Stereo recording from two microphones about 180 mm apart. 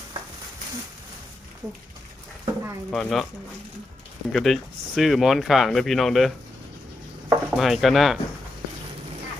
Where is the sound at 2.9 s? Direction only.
Centre (ahead or behind).